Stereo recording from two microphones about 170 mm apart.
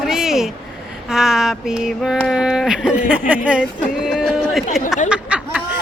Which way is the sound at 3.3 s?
5° right (ahead or behind).